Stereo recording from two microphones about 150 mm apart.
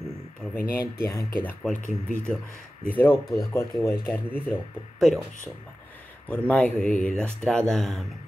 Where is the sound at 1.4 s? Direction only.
10° left (ahead or behind).